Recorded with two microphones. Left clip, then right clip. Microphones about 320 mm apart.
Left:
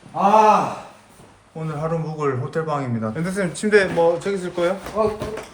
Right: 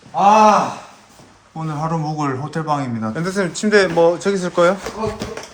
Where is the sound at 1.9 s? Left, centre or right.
Centre.